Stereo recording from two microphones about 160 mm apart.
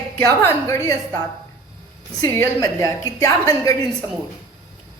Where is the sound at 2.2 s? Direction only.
20° left (ahead or behind).